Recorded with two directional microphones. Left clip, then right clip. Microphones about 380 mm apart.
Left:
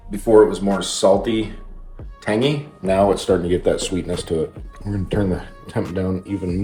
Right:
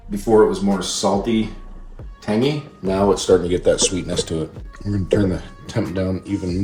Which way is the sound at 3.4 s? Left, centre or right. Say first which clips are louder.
Right 2 dB; centre.